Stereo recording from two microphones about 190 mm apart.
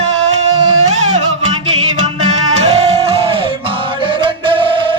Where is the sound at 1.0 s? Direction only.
35° right (ahead or behind).